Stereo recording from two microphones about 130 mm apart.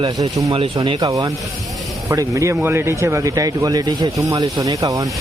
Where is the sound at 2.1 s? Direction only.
25° right (ahead or behind).